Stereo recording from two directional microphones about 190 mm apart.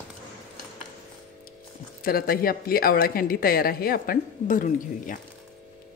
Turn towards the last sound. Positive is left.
turn(degrees=45)  # may be behind; listen again after turning